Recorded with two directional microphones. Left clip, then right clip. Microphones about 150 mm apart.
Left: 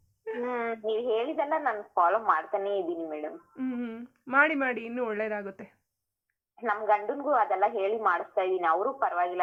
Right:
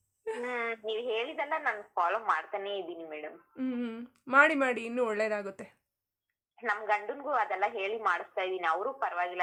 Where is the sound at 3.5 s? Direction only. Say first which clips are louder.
Right 1 dB; 45° right (ahead or behind).